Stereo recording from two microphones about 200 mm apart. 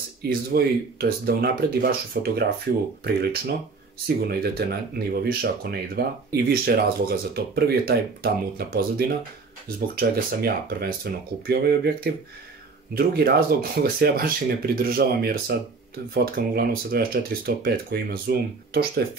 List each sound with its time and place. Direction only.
0.2 s speech: 50° right (ahead or behind)